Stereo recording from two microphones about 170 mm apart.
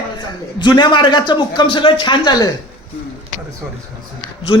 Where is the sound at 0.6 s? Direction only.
25° left (ahead or behind).